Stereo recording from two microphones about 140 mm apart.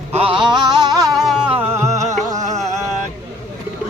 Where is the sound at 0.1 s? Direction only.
45° right (ahead or behind).